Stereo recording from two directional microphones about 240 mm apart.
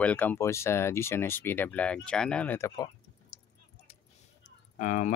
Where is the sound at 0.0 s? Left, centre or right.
Centre.